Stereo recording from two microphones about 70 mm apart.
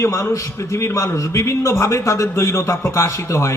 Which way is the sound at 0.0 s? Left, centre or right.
Left.